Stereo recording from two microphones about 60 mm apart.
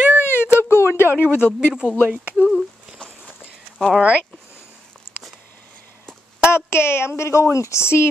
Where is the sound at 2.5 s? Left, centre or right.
Centre.